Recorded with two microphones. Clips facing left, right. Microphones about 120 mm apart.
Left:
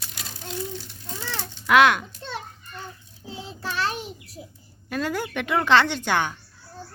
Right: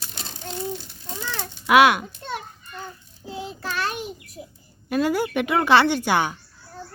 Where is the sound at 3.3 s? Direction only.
30° left (ahead or behind).